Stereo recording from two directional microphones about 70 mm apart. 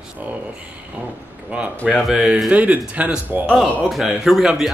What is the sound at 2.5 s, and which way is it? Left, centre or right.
Speech, right.